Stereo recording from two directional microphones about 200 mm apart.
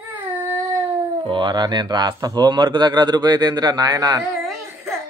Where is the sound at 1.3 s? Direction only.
20° right (ahead or behind).